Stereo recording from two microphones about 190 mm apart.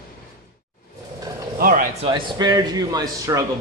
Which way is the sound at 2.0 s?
25° right (ahead or behind).